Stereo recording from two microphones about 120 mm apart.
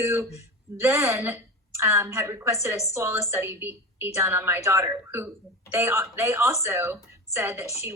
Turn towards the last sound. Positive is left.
turn(degrees=-20)  # may be behind; listen again after turning